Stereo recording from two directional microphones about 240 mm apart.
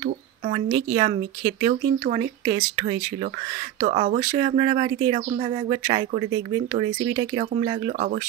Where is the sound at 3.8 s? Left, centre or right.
Right.